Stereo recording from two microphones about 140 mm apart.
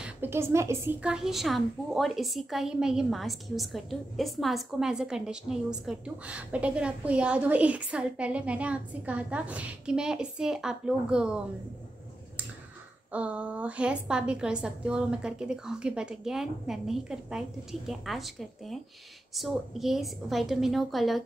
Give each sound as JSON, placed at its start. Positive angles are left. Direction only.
{"t": 0.0, "sound": "a woman's voice", "side_deg": -15}
{"t": 1.0, "sound": "a woman's voice", "side_deg": -5}
{"t": 13.1, "sound": "a woman's voice", "side_deg": -10}